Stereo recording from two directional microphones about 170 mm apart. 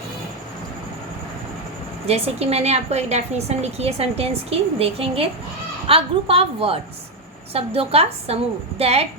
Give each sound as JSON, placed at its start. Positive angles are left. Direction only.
{"t": 2.0, "sound": "a woman's voice", "side_deg": -35}